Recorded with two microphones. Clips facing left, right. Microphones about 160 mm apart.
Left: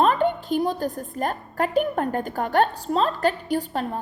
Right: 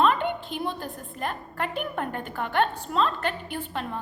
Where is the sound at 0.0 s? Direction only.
40° left (ahead or behind).